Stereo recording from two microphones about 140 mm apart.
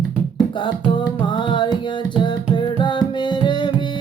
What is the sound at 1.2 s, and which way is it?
Music, 35° left (ahead or behind).